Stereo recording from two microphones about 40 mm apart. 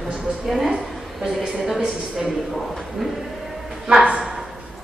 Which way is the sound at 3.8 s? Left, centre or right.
Right.